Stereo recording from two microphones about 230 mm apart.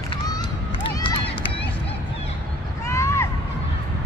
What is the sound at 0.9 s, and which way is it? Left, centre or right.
Run, left.